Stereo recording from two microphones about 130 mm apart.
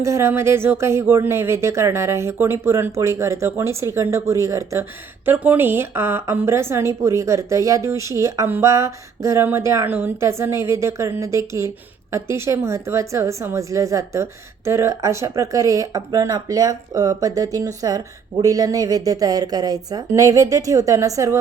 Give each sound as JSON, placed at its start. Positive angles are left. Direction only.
{"t": 0.0, "sound": "speech", "side_deg": -20}